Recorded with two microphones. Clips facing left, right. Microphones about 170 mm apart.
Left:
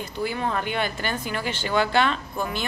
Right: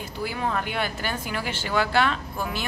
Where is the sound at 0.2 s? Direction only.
5° right (ahead or behind).